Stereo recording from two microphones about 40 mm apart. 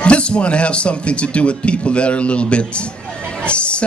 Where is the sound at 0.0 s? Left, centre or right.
Left.